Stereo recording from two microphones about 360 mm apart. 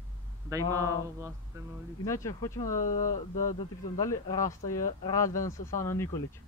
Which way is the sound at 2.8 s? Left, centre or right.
Left.